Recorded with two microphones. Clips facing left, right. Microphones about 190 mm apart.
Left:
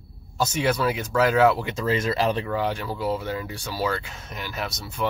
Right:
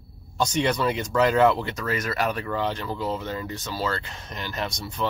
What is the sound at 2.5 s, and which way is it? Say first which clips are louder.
Speech: left 1 dB; 10° left (ahead or behind).